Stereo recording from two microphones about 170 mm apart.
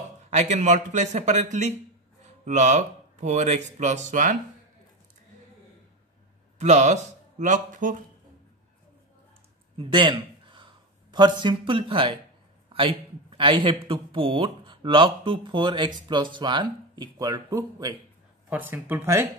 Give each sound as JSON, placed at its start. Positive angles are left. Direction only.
{"t": 0.3, "sound": "speech", "side_deg": -45}
{"t": 6.6, "sound": "speech", "side_deg": -40}
{"t": 9.8, "sound": "a man's voice", "side_deg": -30}